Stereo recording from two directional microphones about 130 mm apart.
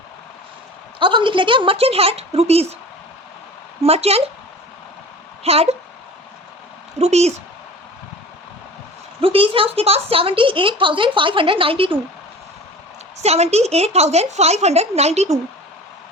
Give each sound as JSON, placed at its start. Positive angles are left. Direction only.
{"t": 0.9, "sound": "a woman's voice", "side_deg": -40}
{"t": 3.8, "sound": "a woman's voice", "side_deg": -55}
{"t": 5.4, "sound": "speech", "side_deg": -50}
{"t": 7.0, "sound": "a woman's voice", "side_deg": -55}
{"t": 9.2, "sound": "a woman's voice", "side_deg": -45}
{"t": 13.2, "sound": "a woman's voice", "side_deg": -55}